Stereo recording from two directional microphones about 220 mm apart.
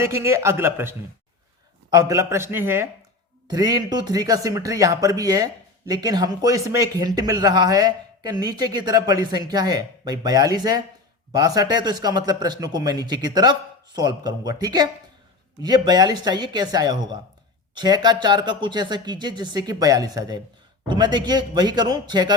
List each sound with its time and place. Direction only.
0.0 s speech: 10° right (ahead or behind)